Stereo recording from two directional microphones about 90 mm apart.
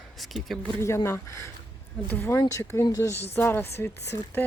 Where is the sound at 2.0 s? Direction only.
20° left (ahead or behind).